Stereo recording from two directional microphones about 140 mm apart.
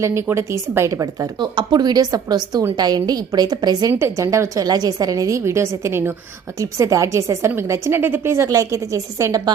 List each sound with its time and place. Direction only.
0.0 s a woman's voice: 20° right (ahead or behind)